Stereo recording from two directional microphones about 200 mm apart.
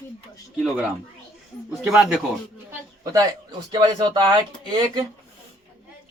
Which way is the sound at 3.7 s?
20° right (ahead or behind).